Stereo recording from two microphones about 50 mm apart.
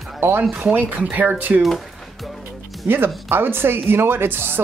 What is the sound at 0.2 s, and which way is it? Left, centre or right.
Speech, right.